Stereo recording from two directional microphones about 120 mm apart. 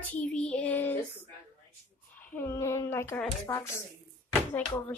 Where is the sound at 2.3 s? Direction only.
20° left (ahead or behind).